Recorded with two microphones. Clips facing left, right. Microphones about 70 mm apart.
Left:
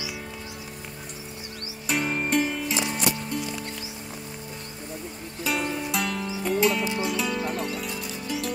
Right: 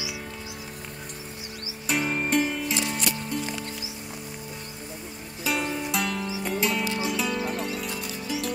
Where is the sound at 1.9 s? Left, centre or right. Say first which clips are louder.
Even; centre.